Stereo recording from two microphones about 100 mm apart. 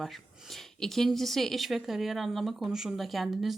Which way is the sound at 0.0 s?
Centre (ahead or behind).